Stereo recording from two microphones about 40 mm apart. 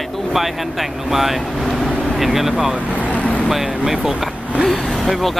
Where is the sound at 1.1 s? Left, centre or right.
Centre.